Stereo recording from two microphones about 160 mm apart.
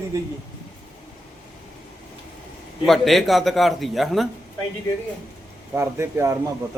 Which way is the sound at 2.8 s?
Centre (ahead or behind).